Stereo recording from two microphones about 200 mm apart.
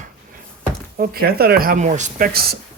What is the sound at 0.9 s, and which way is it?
Speech, 50° right (ahead or behind).